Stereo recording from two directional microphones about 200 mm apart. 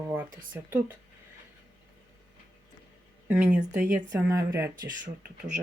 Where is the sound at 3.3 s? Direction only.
5° right (ahead or behind).